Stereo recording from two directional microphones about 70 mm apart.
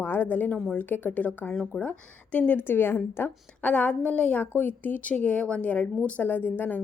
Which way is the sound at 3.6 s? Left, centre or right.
Left.